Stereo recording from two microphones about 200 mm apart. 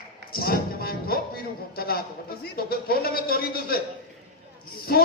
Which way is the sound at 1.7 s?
50° left (ahead or behind).